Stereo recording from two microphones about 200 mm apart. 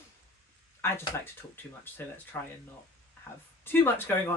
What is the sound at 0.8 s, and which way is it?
Speech, 10° left (ahead or behind).